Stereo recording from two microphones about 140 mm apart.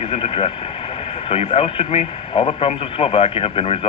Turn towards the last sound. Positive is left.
turn(degrees=45)  # may be behind; listen again after turning